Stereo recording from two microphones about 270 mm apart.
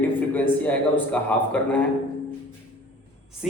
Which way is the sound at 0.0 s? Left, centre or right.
Centre.